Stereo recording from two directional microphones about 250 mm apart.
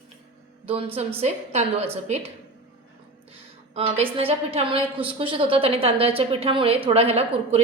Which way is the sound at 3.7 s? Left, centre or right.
Right.